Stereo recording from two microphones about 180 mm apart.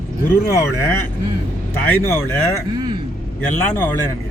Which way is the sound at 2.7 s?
25° right (ahead or behind).